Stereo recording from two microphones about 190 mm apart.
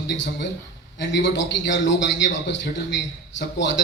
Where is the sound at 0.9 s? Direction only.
65° left (ahead or behind).